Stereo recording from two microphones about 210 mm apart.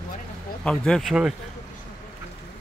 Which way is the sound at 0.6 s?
5° left (ahead or behind).